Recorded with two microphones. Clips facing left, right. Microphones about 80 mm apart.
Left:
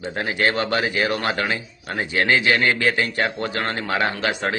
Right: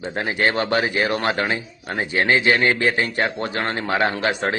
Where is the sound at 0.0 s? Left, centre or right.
Right.